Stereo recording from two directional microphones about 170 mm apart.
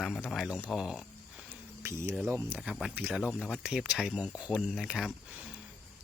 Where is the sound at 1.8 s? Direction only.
15° right (ahead or behind).